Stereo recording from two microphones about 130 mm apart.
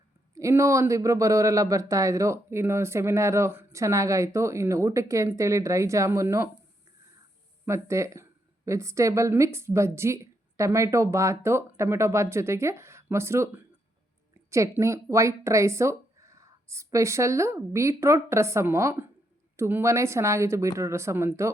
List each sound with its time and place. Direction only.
0.3 s speech: 25° right (ahead or behind)
7.6 s speech: 20° right (ahead or behind)